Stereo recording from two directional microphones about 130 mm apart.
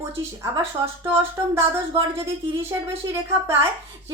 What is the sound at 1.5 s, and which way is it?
Speech, 20° right (ahead or behind).